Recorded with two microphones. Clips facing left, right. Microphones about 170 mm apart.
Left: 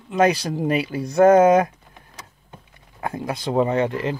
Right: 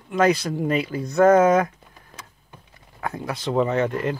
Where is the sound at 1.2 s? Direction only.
30° left (ahead or behind).